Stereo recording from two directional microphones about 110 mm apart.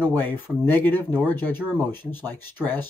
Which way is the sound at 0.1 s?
20° left (ahead or behind).